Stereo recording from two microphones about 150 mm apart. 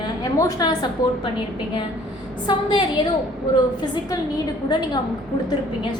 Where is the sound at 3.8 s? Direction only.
30° left (ahead or behind).